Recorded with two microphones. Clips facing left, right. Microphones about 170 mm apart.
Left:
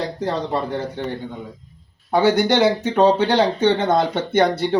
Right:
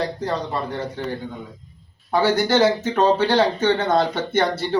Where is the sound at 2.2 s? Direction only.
20° left (ahead or behind).